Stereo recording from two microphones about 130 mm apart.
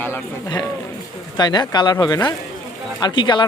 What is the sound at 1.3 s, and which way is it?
Speech, 35° left (ahead or behind).